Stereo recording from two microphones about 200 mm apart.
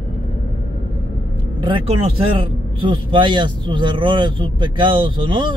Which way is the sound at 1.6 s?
25° right (ahead or behind).